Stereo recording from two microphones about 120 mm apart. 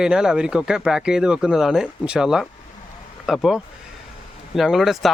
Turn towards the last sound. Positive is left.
turn(degrees=0)  # may be behind; listen again after turning